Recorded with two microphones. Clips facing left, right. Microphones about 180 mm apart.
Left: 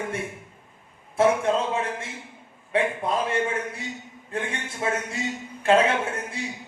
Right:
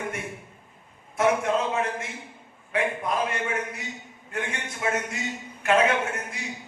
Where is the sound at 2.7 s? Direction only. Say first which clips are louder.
Left 2 dB; 30° left (ahead or behind).